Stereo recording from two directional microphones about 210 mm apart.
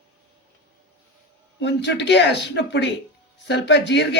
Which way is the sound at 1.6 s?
55° left (ahead or behind).